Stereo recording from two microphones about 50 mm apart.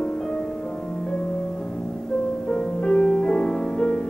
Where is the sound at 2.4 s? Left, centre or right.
Centre.